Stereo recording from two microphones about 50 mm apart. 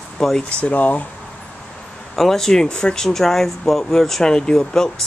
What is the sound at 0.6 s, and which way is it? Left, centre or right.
Speech, left.